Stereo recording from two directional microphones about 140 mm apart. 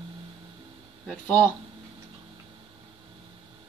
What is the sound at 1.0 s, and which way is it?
Speech, 10° left (ahead or behind).